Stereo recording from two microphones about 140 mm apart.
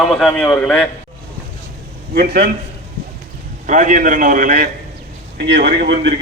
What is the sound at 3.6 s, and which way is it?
Speech, 65° right (ahead or behind).